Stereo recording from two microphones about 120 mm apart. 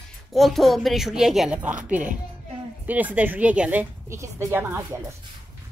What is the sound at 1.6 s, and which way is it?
A woman's voice, 10° right (ahead or behind).